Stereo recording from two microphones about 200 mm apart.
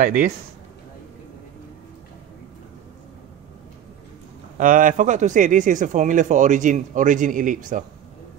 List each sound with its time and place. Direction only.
0.0 s a man's voice: 40° right (ahead or behind)
4.6 s speech: 40° right (ahead or behind)